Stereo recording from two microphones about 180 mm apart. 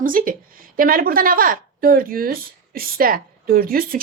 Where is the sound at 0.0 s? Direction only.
50° right (ahead or behind).